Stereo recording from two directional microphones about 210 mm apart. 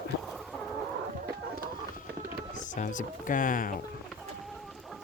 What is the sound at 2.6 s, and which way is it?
Speech, 35° left (ahead or behind).